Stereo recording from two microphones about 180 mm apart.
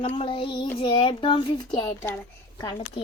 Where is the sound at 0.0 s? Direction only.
30° left (ahead or behind).